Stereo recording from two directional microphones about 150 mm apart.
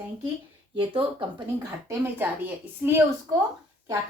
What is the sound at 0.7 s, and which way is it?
Speech, 35° right (ahead or behind).